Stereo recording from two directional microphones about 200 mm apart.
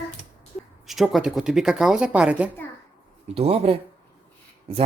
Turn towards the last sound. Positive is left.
turn(degrees=-30)  # may be behind; listen again after turning